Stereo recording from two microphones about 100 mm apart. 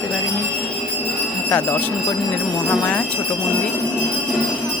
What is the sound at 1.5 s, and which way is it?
Speech, 15° left (ahead or behind).